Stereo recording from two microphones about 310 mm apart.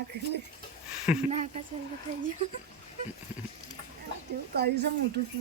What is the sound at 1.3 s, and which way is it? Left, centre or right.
Speech, right.